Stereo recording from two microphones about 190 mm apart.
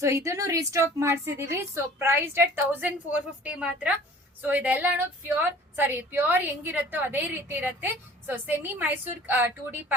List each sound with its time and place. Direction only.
0.0 s speech: 15° right (ahead or behind)